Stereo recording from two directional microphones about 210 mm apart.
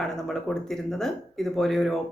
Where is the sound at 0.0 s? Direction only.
Centre (ahead or behind).